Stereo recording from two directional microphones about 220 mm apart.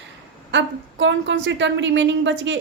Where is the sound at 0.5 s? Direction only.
55° right (ahead or behind).